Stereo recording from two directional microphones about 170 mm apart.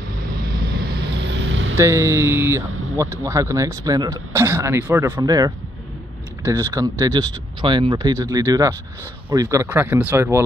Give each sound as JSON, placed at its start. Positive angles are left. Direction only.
{"t": 0.7, "sound": "vehicle", "side_deg": -65}
{"t": 1.8, "sound": "speech", "side_deg": -15}